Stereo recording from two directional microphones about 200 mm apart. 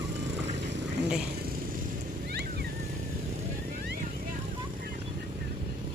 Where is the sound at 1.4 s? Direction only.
50° right (ahead or behind).